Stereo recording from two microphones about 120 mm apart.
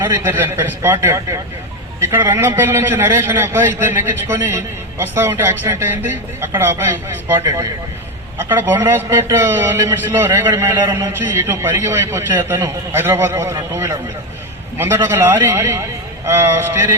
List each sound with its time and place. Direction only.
0.0 s a man's voice: 15° right (ahead or behind)